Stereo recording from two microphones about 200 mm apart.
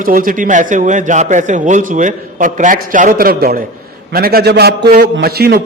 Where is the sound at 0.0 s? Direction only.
45° right (ahead or behind).